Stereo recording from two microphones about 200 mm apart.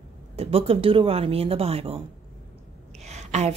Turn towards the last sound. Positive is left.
turn(degrees=-35)  # may be behind; listen again after turning